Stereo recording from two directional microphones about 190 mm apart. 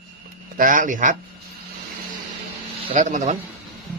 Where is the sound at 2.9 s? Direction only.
40° right (ahead or behind).